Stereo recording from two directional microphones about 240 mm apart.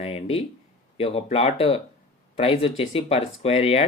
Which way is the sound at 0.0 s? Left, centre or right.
Left.